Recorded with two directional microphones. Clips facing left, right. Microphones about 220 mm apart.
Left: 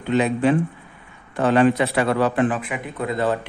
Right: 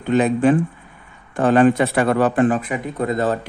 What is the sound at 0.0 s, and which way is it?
A man's voice, 45° right (ahead or behind).